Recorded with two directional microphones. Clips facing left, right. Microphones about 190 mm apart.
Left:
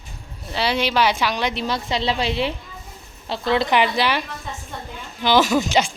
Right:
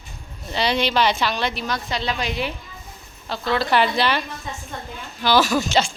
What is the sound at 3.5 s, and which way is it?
Speech, 20° left (ahead or behind).